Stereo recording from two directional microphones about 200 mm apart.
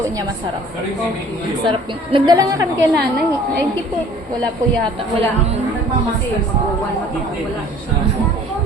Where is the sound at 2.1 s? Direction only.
20° right (ahead or behind).